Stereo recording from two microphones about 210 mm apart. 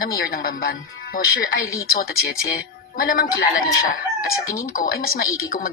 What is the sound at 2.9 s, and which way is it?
Speech, 45° left (ahead or behind).